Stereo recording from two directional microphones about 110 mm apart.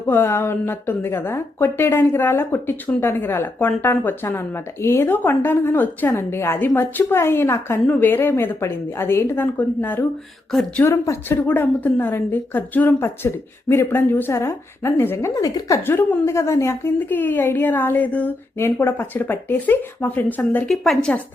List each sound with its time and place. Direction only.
0.1 s a woman's voice: 20° left (ahead or behind)
10.8 s a woman's voice: 25° left (ahead or behind)
15.9 s a woman's voice: 20° left (ahead or behind)
20.7 s a woman's voice: centre (ahead or behind)